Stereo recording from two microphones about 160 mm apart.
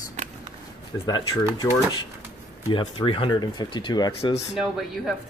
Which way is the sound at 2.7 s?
30° left (ahead or behind).